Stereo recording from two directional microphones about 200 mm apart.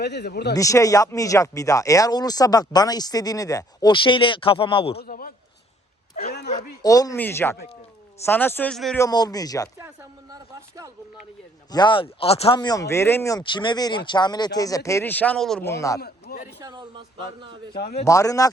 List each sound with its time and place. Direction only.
0.0 s speech: 55° left (ahead or behind)
0.5 s speech: 15° left (ahead or behind)
4.9 s a man's voice: 45° left (ahead or behind)
6.8 s speech: 15° left (ahead or behind)
9.0 s speech: 20° left (ahead or behind)
9.7 s speech: 15° right (ahead or behind)
11.7 s speech: 20° left (ahead or behind); by 15.7 s 5° left (ahead or behind)
15.7 s speech: 15° left (ahead or behind)
16.0 s a man's voice: 50° left (ahead or behind)
16.6 s a man's voice: 20° right (ahead or behind)
17.7 s a man's voice: 50° left (ahead or behind)
18.0 s speech: 15° left (ahead or behind)